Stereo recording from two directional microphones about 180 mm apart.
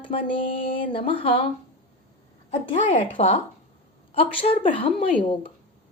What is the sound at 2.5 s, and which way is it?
Speech, 40° left (ahead or behind).